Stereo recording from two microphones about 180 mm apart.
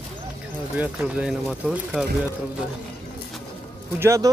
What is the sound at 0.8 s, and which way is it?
Speech, 5° right (ahead or behind).